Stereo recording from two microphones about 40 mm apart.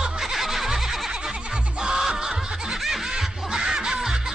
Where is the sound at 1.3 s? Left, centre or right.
Right.